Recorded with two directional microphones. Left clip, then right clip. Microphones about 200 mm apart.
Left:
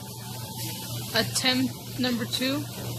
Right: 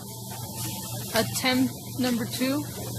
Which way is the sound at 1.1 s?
10° right (ahead or behind).